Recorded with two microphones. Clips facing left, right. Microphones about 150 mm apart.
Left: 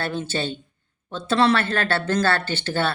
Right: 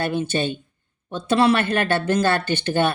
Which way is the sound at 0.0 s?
15° right (ahead or behind).